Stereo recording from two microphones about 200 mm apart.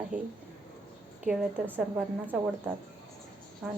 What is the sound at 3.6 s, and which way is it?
Speech, centre (ahead or behind).